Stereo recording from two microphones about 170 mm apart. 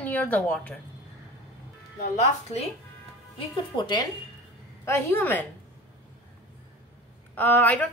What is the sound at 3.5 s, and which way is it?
Speech, 25° left (ahead or behind).